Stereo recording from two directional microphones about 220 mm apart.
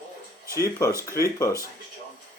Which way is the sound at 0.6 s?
15° left (ahead or behind).